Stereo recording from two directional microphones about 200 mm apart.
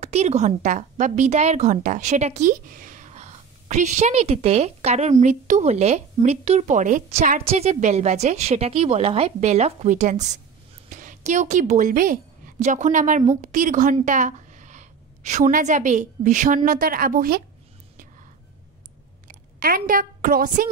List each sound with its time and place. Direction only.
0.0 s a woman's voice: 35° right (ahead or behind)
19.2 s a woman's voice: 45° right (ahead or behind)